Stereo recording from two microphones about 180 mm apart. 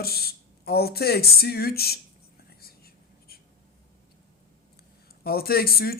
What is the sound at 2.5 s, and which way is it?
Whispering, 55° left (ahead or behind).